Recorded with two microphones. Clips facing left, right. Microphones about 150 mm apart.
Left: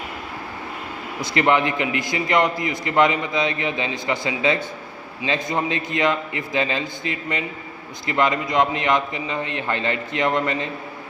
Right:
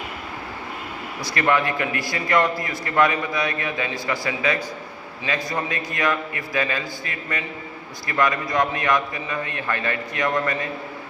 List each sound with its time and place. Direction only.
1.2 s a man's voice: 20° left (ahead or behind)